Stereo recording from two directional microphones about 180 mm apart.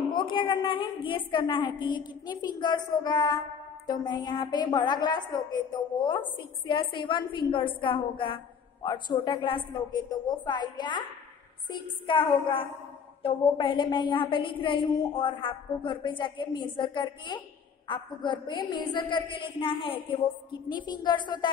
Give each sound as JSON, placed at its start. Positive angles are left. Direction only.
{"t": 0.1, "sound": "a woman's voice", "side_deg": 25}
{"t": 12.1, "sound": "a woman's voice", "side_deg": 25}